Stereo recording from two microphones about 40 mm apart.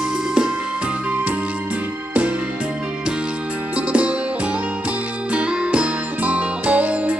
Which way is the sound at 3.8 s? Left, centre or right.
Right.